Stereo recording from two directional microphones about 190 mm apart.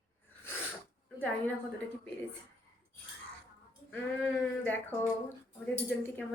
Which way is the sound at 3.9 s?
5° left (ahead or behind).